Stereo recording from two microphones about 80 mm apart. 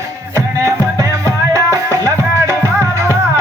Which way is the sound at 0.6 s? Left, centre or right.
Right.